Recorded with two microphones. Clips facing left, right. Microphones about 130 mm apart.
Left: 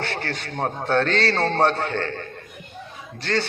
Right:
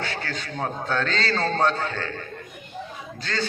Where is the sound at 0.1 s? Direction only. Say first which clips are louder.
Left 2 dB; 60° left (ahead or behind).